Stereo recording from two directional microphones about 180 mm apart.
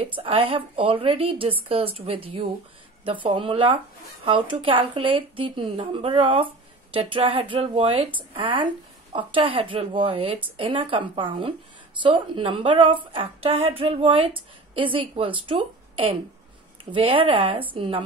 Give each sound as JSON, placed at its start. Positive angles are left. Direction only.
{"t": 0.0, "sound": "a woman's voice", "side_deg": -30}